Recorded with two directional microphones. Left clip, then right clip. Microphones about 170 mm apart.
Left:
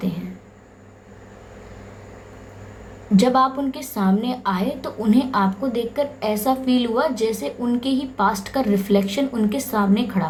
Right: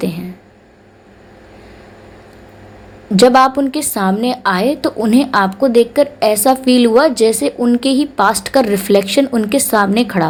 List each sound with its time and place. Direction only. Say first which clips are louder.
3.2 s a woman's voice: right 9 dB; 45° right (ahead or behind)